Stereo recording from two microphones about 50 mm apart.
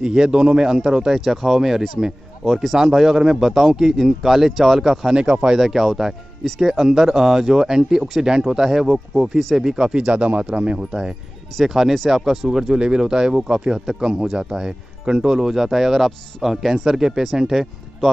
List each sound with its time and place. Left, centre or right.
0.0 s a man's voice: centre
5.3 s speech: right
5.6 s a man's voice: centre
11.5 s a man's voice: centre